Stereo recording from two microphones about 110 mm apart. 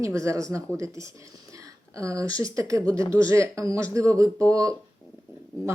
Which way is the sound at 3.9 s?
30° right (ahead or behind).